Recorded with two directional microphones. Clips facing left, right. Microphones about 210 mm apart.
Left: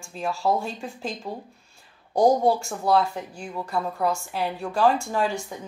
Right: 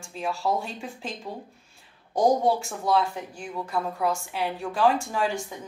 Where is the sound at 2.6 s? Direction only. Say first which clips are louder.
Left 2 dB; 40° left (ahead or behind).